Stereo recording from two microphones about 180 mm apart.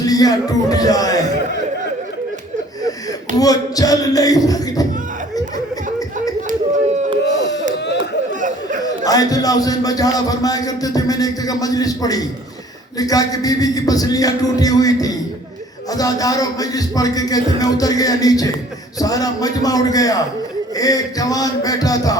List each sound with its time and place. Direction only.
0.0 s a man's voice: 20° left (ahead or behind)
3.3 s a man's voice: 20° left (ahead or behind)
8.4 s chatter: 45° right (ahead or behind)
8.8 s a man's voice: 20° left (ahead or behind)